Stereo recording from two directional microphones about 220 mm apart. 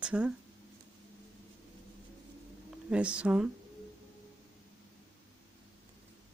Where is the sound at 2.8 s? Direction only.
5° right (ahead or behind).